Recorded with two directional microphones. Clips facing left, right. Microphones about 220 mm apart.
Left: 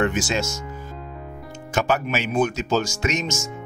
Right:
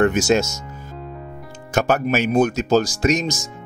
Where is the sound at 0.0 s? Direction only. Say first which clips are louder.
Right 6 dB; 45° right (ahead or behind).